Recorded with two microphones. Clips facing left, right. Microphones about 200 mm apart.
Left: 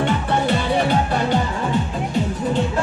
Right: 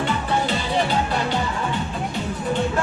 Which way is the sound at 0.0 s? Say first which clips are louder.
Left 3 dB; 55° left (ahead or behind).